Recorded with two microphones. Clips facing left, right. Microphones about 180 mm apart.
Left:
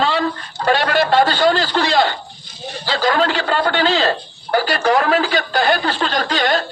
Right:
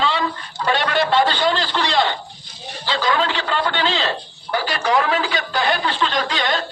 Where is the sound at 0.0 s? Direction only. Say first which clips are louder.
Left 3 dB; 45° left (ahead or behind).